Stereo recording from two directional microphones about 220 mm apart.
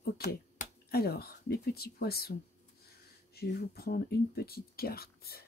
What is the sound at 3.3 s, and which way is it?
Speech, 45° left (ahead or behind).